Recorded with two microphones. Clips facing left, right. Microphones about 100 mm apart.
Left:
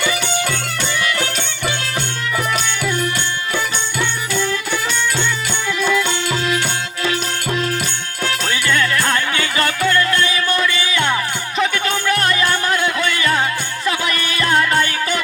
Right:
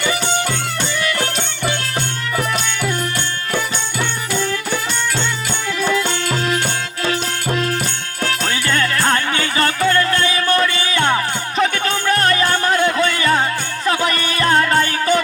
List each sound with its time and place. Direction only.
0.0 s music: 35° right (ahead or behind)
5.8 s music: 35° right (ahead or behind)
8.2 s music: 35° right (ahead or behind)